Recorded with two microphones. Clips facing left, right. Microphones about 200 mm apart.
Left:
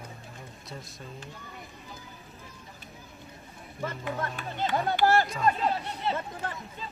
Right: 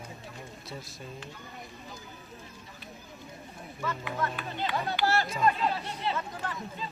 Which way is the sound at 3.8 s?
50° left (ahead or behind).